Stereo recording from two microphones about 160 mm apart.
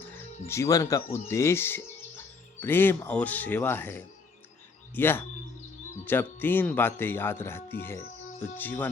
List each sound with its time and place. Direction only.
0.1 s speech: 15° left (ahead or behind)